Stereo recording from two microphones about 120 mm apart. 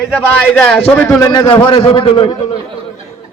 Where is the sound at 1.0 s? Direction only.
25° left (ahead or behind); by 2.3 s 45° left (ahead or behind).